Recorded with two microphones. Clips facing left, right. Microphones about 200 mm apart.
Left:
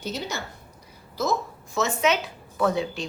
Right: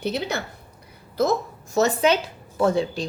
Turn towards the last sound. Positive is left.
turn(degrees=-30)  # may be behind; listen again after turning